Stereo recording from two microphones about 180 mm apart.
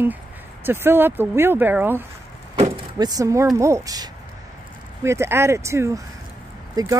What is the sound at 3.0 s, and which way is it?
Speech, 20° right (ahead or behind).